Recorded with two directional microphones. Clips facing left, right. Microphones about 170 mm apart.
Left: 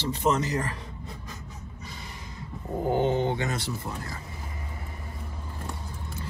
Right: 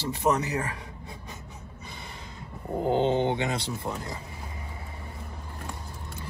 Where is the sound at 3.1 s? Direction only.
20° right (ahead or behind).